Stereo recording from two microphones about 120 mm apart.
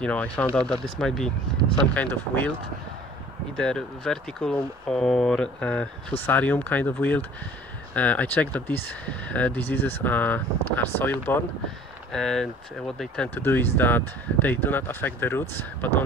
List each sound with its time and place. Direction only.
0.0 s speech: 10° left (ahead or behind)
3.5 s speech: 5° left (ahead or behind)
12.1 s speech: 5° left (ahead or behind)